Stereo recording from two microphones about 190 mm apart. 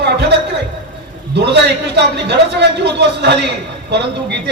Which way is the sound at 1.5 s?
65° right (ahead or behind).